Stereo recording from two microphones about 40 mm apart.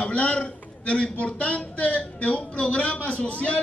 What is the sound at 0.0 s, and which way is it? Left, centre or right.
A man's voice, left.